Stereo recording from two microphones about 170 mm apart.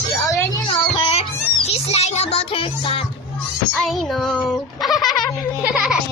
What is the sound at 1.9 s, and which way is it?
Music, 40° left (ahead or behind).